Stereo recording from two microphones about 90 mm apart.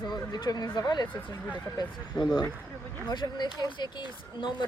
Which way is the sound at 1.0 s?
20° left (ahead or behind).